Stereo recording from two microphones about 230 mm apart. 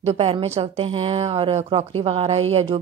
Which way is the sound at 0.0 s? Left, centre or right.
Right.